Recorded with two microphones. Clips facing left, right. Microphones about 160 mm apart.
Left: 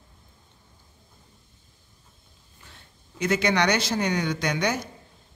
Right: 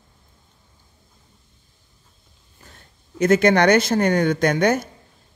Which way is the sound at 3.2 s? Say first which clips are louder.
Right 8 dB; 50° right (ahead or behind).